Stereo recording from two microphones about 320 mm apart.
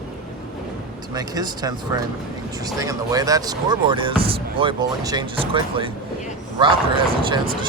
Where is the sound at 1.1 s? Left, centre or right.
Centre.